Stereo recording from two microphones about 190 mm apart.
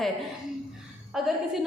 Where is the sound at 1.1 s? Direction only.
Centre (ahead or behind).